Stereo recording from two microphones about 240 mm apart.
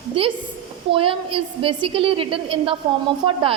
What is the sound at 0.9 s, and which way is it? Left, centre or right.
A woman's voice, right.